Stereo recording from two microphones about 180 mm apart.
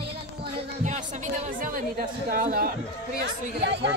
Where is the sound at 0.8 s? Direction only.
40° right (ahead or behind).